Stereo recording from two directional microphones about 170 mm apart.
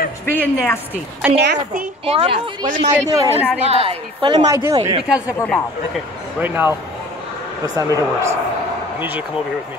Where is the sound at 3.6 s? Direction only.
35° right (ahead or behind).